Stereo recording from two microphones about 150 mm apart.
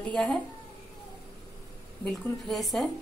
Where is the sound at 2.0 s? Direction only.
Centre (ahead or behind).